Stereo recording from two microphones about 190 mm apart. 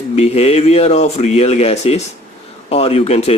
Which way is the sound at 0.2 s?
30° left (ahead or behind).